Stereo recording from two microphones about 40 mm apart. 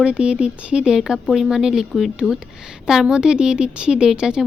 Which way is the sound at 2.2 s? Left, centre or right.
Right.